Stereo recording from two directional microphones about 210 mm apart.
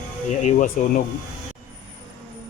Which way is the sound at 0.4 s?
35° left (ahead or behind).